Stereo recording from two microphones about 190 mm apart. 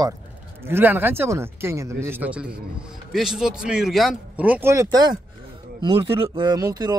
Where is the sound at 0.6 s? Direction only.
10° right (ahead or behind).